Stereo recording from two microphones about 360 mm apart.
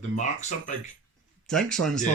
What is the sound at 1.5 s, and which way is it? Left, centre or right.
Speech, centre.